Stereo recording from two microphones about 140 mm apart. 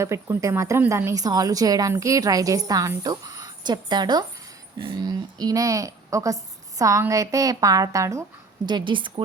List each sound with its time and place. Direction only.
0.0 s a woman's voice: 20° right (ahead or behind)
8.6 s a woman's voice: 35° right (ahead or behind)